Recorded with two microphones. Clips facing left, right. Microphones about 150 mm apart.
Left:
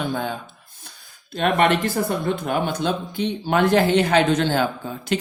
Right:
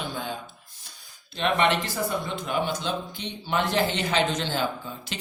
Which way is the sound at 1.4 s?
50° left (ahead or behind).